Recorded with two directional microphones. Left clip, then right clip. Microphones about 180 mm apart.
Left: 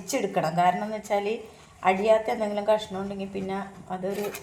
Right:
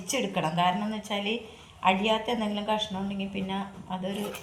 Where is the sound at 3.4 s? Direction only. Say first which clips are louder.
Left 2 dB; 60° left (ahead or behind).